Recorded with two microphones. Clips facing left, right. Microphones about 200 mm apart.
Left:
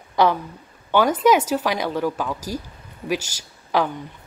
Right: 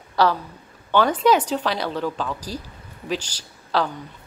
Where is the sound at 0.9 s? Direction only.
10° left (ahead or behind).